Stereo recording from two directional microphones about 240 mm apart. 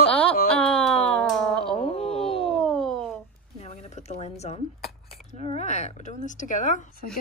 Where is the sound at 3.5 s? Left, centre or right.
Left.